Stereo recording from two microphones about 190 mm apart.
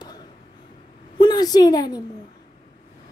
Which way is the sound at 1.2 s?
20° left (ahead or behind).